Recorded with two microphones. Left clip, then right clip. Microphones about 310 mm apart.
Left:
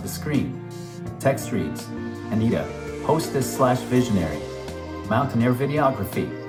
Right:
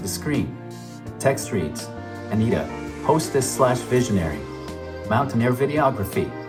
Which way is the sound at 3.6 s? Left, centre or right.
Right.